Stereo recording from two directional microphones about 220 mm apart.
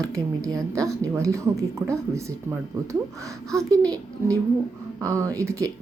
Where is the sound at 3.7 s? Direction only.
15° right (ahead or behind).